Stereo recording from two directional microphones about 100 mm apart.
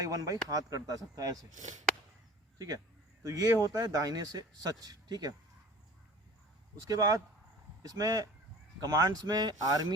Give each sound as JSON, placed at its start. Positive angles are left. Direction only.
{"t": 0.0, "sound": "a man's voice", "side_deg": -35}
{"t": 2.6, "sound": "a man's voice", "side_deg": -40}
{"t": 6.8, "sound": "a man's voice", "side_deg": -40}